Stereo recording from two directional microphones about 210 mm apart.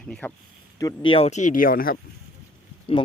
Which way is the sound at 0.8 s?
20° left (ahead or behind).